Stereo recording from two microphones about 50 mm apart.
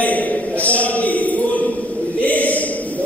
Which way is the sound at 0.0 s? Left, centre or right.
Left.